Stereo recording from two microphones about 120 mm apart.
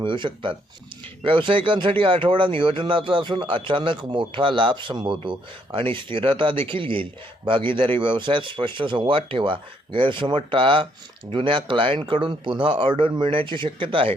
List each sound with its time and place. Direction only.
0.0 s speech: 45° right (ahead or behind)